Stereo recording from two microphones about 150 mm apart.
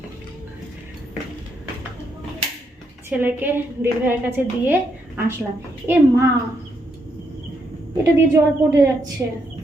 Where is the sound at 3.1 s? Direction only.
15° right (ahead or behind).